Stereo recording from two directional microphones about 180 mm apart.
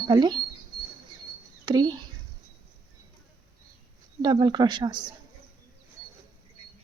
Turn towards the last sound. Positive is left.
turn(degrees=-25)  # may be behind; listen again after turning